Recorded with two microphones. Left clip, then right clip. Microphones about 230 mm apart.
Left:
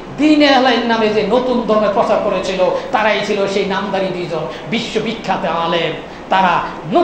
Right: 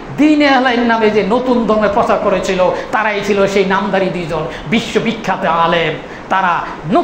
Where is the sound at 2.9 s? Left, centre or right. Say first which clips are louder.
Right 1 dB; right.